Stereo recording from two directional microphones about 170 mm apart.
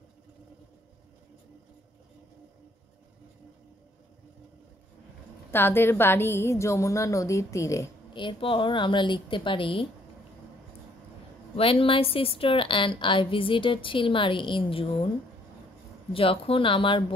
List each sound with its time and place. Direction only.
5.5 s a woman's voice: 15° left (ahead or behind)
8.1 s speech: 30° left (ahead or behind)
11.5 s a woman's voice: 35° left (ahead or behind)
16.1 s a woman's voice: 35° left (ahead or behind)